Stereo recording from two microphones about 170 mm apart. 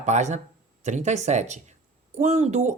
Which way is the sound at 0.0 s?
45° right (ahead or behind).